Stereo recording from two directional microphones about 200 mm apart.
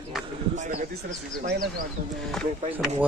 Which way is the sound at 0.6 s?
35° right (ahead or behind).